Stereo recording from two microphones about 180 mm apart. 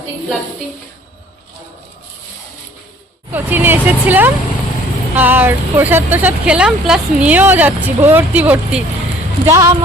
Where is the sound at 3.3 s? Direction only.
10° right (ahead or behind).